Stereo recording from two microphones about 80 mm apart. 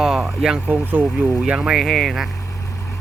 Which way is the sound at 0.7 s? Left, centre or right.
Right.